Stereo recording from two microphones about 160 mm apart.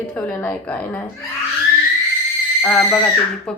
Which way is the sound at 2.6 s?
10° left (ahead or behind).